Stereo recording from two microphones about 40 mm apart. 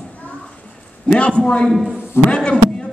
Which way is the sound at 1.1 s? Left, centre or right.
Left.